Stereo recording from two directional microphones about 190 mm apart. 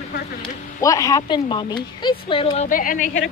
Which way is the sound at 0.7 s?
15° left (ahead or behind).